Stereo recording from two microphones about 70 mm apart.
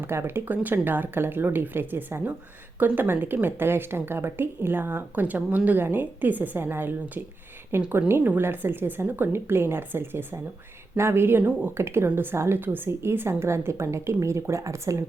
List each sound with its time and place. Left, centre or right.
0.0 s speech: right